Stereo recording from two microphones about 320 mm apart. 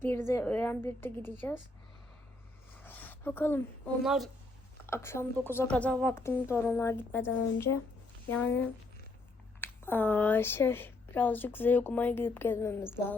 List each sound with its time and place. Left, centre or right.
0.0 s speech: centre
2.8 s a sound: centre
4.0 s speech: centre
7.3 s a woman's voice: left
8.3 s speech: centre